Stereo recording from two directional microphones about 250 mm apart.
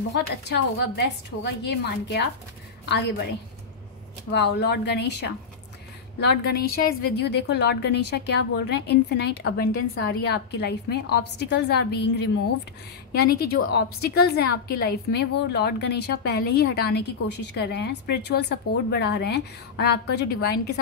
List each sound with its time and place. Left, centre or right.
0.1 s a woman's voice: left
4.3 s speech: left
6.6 s a woman's voice: left